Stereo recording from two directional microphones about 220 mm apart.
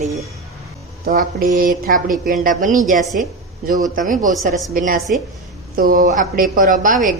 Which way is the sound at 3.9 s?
35° right (ahead or behind).